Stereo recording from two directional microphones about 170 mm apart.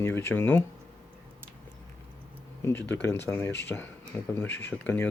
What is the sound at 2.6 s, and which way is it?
Speech, 15° left (ahead or behind).